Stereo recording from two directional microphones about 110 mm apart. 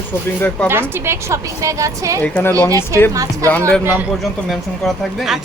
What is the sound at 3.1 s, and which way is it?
Speech, 30° right (ahead or behind).